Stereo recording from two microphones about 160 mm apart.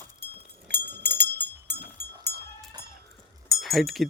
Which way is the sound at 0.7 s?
90° right.